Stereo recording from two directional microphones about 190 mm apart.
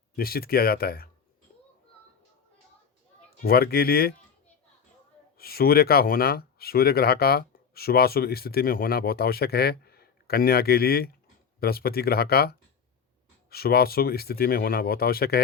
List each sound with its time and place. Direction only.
0.2 s speech: 50° left (ahead or behind)
3.4 s speech: 55° left (ahead or behind)
5.4 s speech: 55° left (ahead or behind)